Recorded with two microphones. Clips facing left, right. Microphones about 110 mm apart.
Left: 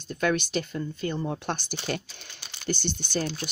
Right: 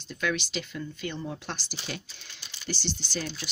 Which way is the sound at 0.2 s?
45° left (ahead or behind).